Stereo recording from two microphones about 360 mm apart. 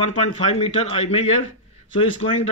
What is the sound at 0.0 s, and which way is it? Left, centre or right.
Speech, centre.